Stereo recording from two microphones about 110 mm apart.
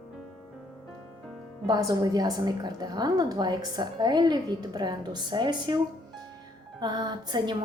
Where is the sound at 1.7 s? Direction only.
35° right (ahead or behind).